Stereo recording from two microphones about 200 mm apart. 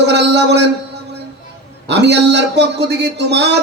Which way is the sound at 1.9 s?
55° right (ahead or behind).